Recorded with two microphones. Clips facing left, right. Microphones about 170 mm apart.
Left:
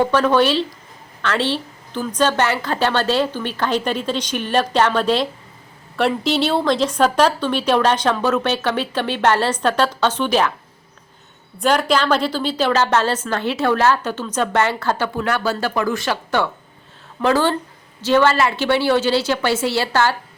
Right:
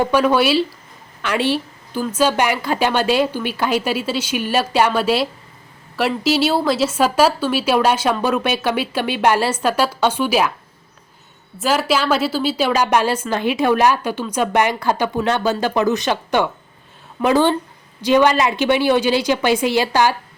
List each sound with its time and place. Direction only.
0.0 s a woman's voice: 10° right (ahead or behind)
11.5 s a woman's voice: 5° right (ahead or behind)